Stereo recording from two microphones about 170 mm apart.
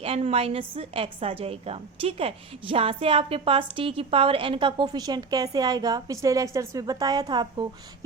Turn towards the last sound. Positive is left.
turn(degrees=-25)  # may be behind; listen again after turning